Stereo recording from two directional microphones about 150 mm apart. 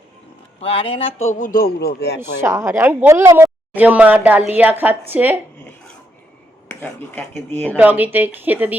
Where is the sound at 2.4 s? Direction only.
20° right (ahead or behind).